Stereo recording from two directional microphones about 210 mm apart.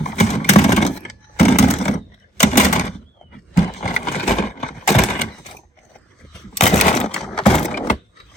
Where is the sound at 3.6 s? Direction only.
30° left (ahead or behind).